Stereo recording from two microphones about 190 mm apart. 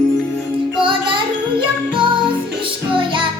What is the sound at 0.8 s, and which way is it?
Music, 25° right (ahead or behind).